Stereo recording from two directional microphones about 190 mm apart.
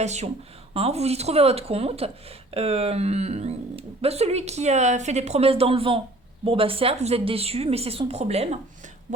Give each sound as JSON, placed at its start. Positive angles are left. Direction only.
{"t": 0.0, "sound": "speech", "side_deg": -35}